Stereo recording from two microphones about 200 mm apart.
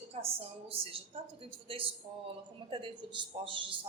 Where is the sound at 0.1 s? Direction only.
30° right (ahead or behind).